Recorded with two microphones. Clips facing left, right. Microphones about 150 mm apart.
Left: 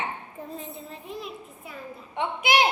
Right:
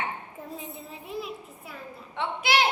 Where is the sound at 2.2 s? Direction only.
15° left (ahead or behind).